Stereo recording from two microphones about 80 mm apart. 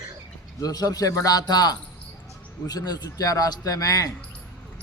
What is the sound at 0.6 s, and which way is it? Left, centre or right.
A man's voice, left.